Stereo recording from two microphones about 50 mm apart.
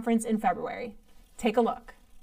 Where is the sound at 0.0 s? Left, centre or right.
Centre.